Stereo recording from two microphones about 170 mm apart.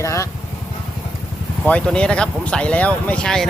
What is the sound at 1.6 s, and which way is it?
Speech, 5° left (ahead or behind).